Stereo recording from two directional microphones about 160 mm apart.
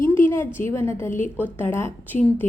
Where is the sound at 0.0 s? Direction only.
15° left (ahead or behind).